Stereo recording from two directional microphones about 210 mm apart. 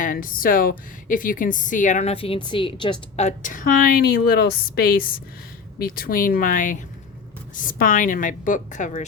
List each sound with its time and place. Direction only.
0.0 s a woman's voice: 40° left (ahead or behind)